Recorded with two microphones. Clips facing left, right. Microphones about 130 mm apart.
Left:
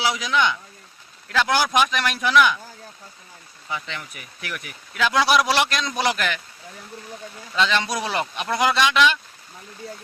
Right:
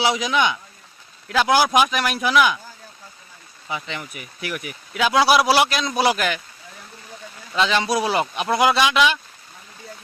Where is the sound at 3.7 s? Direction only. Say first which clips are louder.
Right 2 dB; 10° right (ahead or behind).